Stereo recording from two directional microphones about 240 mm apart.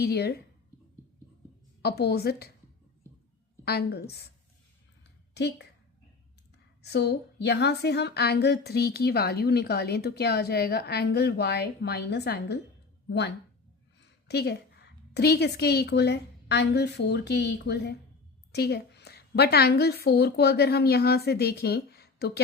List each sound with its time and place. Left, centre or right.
0.0 s a woman's voice: left
1.8 s a woman's voice: left
3.1 s a sound: centre
3.6 s a woman's voice: left
5.3 s a woman's voice: left
6.8 s a woman's voice: left